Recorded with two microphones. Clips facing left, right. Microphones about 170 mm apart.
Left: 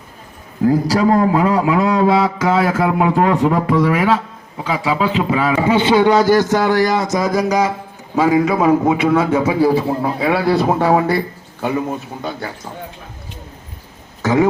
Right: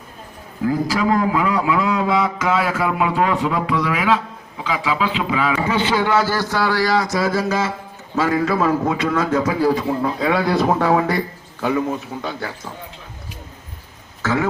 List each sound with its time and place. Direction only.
0.6 s speech: 40° left (ahead or behind)
5.7 s a man's voice: 20° left (ahead or behind)
14.2 s a sound: 15° left (ahead or behind)